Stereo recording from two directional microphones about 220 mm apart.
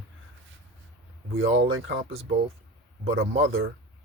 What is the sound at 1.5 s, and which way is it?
Speech, 65° right (ahead or behind).